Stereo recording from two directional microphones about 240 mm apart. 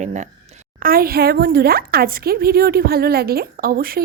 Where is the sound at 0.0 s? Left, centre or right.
Right.